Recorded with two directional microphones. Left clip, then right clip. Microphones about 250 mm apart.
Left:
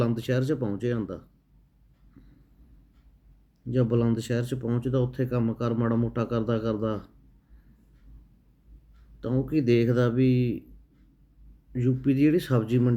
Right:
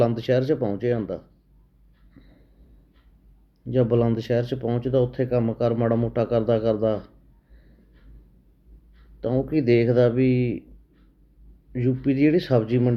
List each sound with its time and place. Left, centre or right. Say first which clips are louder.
0.0 s speech: right 7 dB; centre
2.2 s a sound: right 3 dB; centre
3.7 s speech: right 5 dB; centre
9.2 s speech: right 4 dB; centre
11.7 s speech: right 2 dB; centre